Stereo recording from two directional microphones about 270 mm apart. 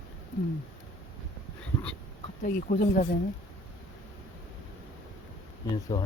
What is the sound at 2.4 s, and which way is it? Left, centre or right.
Speech, left.